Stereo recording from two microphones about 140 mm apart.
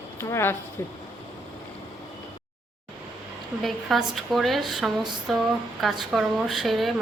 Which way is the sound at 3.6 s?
Centre (ahead or behind).